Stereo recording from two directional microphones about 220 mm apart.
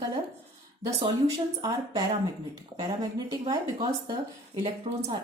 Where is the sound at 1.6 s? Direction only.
20° right (ahead or behind).